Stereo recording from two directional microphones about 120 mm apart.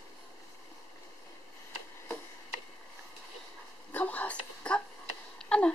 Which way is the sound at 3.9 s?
10° left (ahead or behind).